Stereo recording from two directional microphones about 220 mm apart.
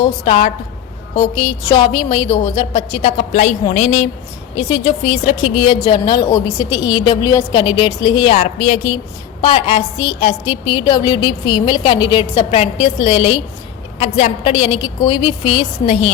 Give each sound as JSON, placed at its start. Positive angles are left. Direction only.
{"t": 0.0, "sound": "a woman's voice", "side_deg": 25}